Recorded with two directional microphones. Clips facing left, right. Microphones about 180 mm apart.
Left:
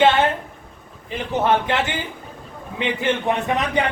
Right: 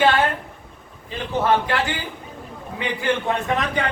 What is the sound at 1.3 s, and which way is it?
A man's voice, 20° left (ahead or behind).